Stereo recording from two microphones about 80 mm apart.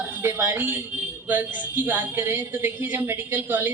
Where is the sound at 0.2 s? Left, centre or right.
Right.